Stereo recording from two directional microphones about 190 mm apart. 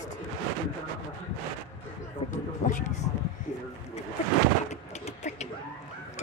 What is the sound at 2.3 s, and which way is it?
Speech, 40° left (ahead or behind).